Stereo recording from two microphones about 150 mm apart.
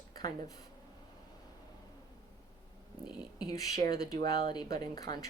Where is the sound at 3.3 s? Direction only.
25° left (ahead or behind).